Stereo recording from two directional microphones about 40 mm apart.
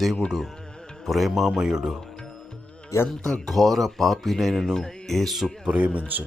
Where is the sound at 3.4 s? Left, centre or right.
Centre.